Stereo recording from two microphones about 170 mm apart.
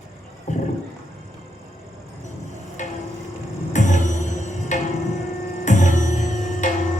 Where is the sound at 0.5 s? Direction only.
45° left (ahead or behind).